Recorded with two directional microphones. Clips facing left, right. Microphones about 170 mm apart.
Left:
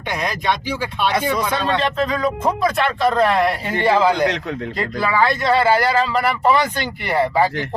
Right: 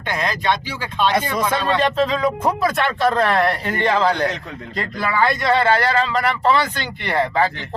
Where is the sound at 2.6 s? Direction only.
Centre (ahead or behind).